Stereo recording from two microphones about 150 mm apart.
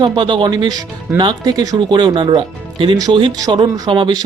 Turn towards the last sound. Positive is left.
turn(degrees=-30)  # may be behind; listen again after turning